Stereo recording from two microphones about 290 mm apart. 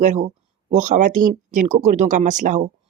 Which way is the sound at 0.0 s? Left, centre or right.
Right.